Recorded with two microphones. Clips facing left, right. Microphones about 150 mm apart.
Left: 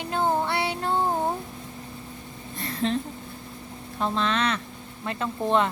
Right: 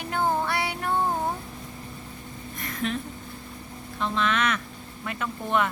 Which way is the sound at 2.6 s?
30° left (ahead or behind).